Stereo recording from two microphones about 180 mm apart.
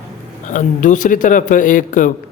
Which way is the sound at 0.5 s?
45° left (ahead or behind).